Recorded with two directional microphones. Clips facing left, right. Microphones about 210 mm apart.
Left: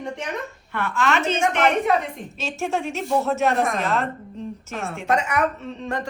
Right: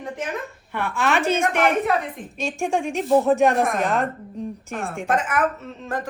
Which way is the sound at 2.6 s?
15° right (ahead or behind).